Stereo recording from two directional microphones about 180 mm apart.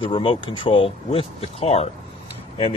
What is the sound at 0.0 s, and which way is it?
Speech, 30° left (ahead or behind).